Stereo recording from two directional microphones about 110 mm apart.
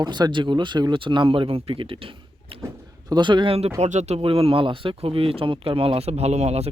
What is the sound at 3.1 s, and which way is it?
Speech, 45° right (ahead or behind).